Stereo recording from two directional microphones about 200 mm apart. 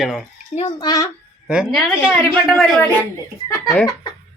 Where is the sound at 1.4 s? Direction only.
5° right (ahead or behind).